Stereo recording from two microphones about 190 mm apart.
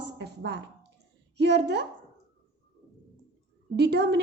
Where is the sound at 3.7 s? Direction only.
60° right (ahead or behind).